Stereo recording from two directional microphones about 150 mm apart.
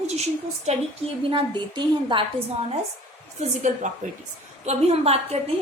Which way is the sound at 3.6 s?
55° right (ahead or behind).